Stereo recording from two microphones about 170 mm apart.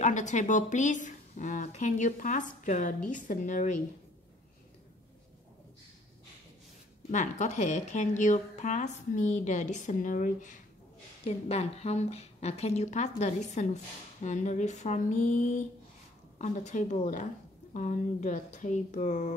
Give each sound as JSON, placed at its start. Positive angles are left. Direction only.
{"t": 0.0, "sound": "speech", "side_deg": 45}
{"t": 7.1, "sound": "speech", "side_deg": 45}
{"t": 11.2, "sound": "a woman's voice", "side_deg": 35}